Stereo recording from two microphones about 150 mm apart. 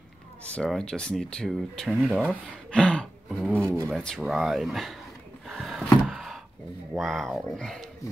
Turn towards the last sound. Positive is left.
turn(degrees=0)  # may be behind; listen again after turning